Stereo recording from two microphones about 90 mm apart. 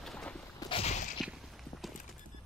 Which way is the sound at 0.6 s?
45° left (ahead or behind).